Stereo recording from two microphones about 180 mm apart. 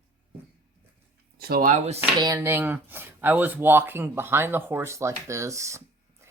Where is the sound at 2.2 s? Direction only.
20° right (ahead or behind).